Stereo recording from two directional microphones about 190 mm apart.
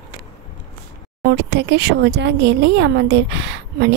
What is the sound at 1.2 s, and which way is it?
Speech, 60° right (ahead or behind).